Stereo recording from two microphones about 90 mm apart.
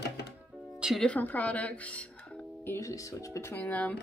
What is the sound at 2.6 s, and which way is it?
Speech, 35° left (ahead or behind).